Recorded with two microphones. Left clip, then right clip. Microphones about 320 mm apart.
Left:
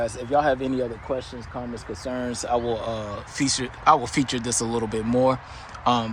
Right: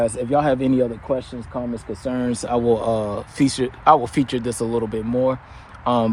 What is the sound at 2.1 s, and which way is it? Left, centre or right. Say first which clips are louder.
Speech: right 3 dB; right.